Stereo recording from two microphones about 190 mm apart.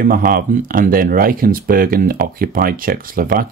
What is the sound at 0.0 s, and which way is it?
Speech, 50° right (ahead or behind).